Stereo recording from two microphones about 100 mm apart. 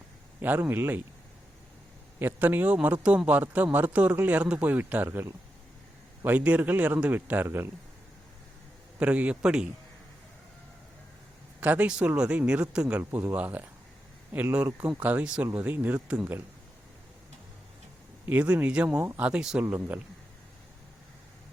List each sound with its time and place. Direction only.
0.4 s speech: 20° right (ahead or behind)
2.1 s a man's voice: 20° right (ahead or behind)
6.2 s a man's voice: 15° right (ahead or behind)
9.0 s a man's voice: 15° right (ahead or behind)
11.6 s a man's voice: 15° right (ahead or behind)
13.0 s a man's voice: 25° right (ahead or behind)
18.3 s a man's voice: 15° right (ahead or behind)